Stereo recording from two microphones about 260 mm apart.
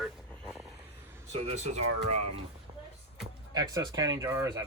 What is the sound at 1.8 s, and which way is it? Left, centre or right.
Speech, right.